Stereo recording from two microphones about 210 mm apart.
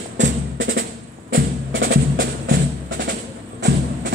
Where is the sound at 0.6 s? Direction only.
60° right (ahead or behind).